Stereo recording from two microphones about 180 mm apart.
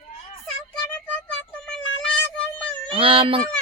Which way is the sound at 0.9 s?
10° left (ahead or behind).